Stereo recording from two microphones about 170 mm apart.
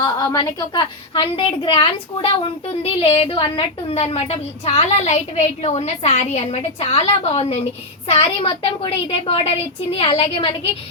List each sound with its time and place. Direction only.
0.0 s a woman's voice: 20° left (ahead or behind)